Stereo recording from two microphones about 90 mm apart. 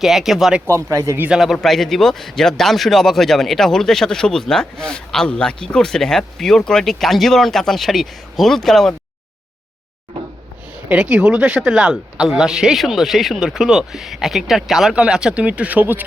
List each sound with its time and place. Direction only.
0.0 s speech: 5° right (ahead or behind)
0.7 s speech: 35° right (ahead or behind)
1.5 s speech: 5° left (ahead or behind)
10.9 s speech: 10° right (ahead or behind)